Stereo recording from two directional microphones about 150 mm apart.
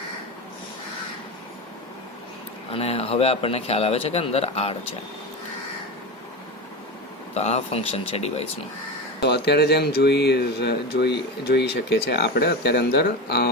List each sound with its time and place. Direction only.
2.7 s speech: 40° left (ahead or behind)
7.3 s speech: 45° left (ahead or behind)
9.2 s speech: 90° left